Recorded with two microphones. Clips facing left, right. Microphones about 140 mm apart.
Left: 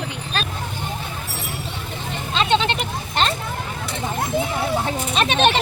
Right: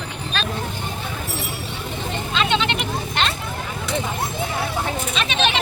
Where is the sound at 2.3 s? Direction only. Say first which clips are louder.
Left 3 dB; 35° left (ahead or behind).